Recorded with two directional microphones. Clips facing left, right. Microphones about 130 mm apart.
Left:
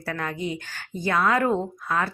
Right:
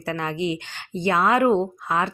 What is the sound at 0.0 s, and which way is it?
A woman's voice, 20° right (ahead or behind).